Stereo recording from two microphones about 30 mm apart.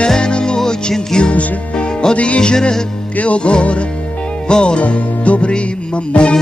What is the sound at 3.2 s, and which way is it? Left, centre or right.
Music, left.